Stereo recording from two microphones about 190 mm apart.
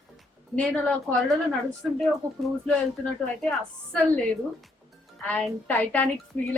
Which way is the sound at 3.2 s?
5° left (ahead or behind).